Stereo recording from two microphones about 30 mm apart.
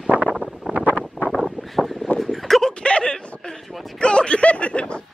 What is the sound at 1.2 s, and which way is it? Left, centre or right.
Vehicle, right.